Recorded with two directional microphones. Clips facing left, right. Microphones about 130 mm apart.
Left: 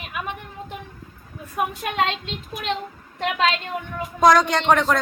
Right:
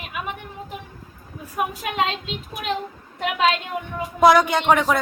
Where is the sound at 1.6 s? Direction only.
Centre (ahead or behind).